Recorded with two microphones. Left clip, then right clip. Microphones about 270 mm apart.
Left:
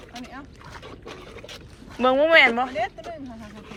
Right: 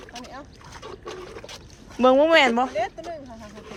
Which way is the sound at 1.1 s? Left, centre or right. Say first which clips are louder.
Right 2 dB; right.